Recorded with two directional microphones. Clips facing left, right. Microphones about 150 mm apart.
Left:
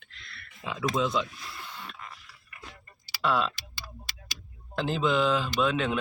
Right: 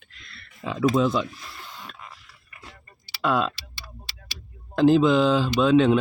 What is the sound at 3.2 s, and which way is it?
Speech, 45° right (ahead or behind).